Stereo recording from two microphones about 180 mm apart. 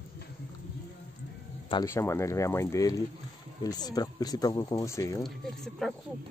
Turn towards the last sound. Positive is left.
turn(degrees=0)  # may be behind; listen again after turning